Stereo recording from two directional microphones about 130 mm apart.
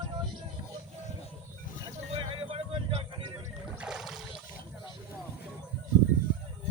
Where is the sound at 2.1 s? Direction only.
45° right (ahead or behind).